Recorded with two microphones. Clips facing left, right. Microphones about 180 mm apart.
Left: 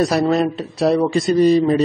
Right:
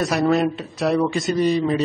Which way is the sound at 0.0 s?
35° left (ahead or behind).